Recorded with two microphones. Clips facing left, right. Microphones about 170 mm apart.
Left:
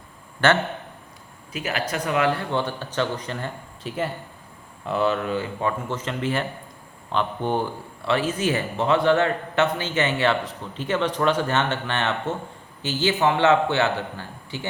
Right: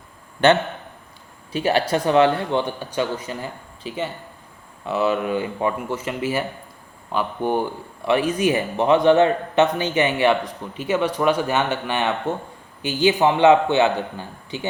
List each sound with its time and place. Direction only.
1.5 s speech: 30° right (ahead or behind)